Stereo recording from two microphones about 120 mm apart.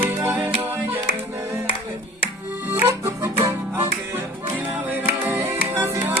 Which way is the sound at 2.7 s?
20° right (ahead or behind).